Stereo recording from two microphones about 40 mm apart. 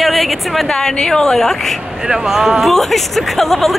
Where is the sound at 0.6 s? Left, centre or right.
Left.